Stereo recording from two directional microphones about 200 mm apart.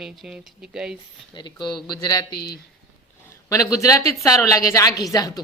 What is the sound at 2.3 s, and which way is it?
Speech, 50° left (ahead or behind).